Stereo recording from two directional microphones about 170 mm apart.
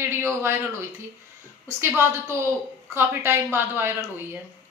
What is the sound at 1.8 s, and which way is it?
A woman's voice, 15° right (ahead or behind).